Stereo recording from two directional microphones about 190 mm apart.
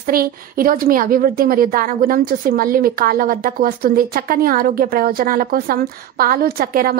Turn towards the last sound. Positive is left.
turn(degrees=-50)  # may be behind; listen again after turning